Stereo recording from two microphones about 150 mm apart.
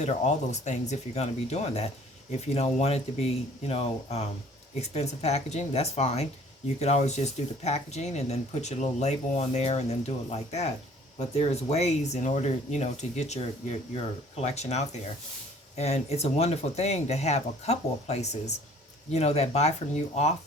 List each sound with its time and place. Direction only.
0.0 s speech: 50° left (ahead or behind)